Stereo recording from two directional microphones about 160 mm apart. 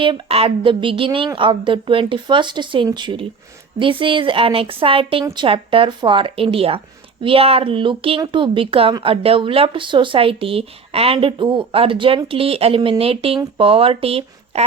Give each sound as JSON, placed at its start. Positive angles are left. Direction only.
{"t": 0.0, "sound": "a woman's voice", "side_deg": -35}